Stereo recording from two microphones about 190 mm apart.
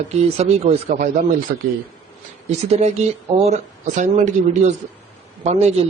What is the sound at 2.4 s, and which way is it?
Speech, 35° right (ahead or behind).